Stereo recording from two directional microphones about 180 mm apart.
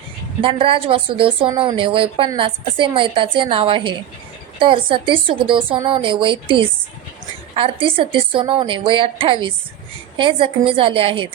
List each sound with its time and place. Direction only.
0.4 s a woman's voice: 30° right (ahead or behind)